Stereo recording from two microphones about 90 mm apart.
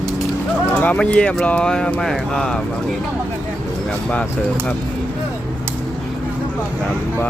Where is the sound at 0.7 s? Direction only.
15° left (ahead or behind).